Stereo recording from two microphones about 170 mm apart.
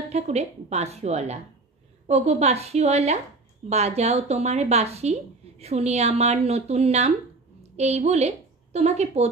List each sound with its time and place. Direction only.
0.1 s a woman's voice: 40° right (ahead or behind)